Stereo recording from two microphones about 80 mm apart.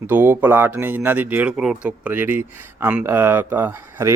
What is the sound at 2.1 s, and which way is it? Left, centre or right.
Speech, right.